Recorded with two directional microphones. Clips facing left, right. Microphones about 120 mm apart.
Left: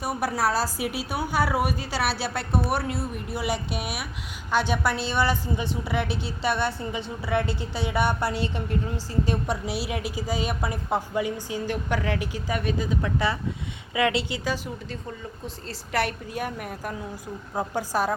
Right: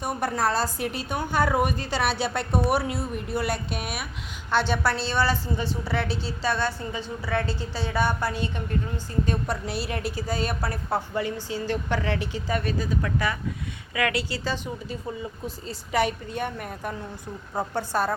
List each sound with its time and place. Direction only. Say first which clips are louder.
0.0 s a woman's voice: even; 5° left (ahead or behind); by 8.3 s 25° left (ahead or behind)
9.5 s a woman's voice: left 1 dB; 10° left (ahead or behind)
15.4 s a woman's voice: right 2 dB; centre (ahead or behind)